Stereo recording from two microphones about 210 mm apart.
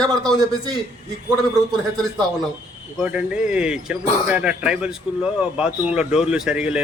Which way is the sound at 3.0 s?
5° right (ahead or behind).